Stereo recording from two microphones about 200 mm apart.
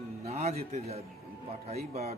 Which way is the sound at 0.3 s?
30° right (ahead or behind).